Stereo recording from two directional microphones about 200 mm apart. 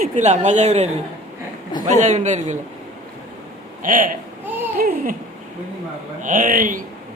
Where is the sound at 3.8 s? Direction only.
40° right (ahead or behind).